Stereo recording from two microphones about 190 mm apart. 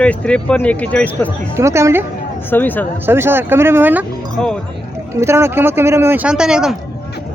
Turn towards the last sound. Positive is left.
turn(degrees=-5)  # may be behind; listen again after turning